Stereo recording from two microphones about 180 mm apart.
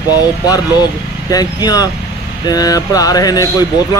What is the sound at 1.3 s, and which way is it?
Speech, 20° left (ahead or behind).